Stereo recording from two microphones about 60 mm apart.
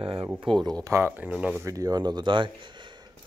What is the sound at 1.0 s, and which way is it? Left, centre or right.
Speech, right.